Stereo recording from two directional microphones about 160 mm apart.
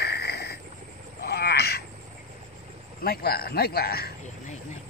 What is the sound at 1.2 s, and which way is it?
Crow, 85° left.